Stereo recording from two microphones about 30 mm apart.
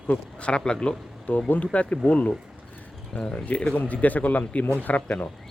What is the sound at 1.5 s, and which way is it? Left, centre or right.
Speech, left.